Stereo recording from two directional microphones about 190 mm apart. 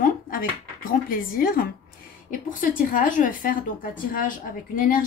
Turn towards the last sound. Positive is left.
turn(degrees=45)  # may be behind; listen again after turning